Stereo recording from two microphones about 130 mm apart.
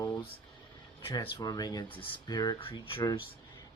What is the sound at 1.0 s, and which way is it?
Speech, 45° left (ahead or behind).